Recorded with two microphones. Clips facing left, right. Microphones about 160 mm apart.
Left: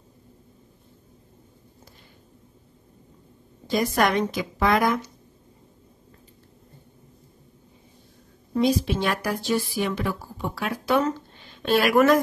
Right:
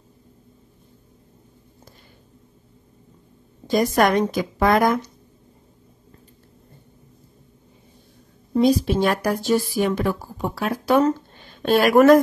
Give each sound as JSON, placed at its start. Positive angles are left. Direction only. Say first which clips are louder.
{"t": 3.6, "sound": "a woman's voice", "louder": "right 4 dB", "side_deg": -45}
{"t": 8.5, "sound": "a woman's voice", "louder": "right 4 dB", "side_deg": -40}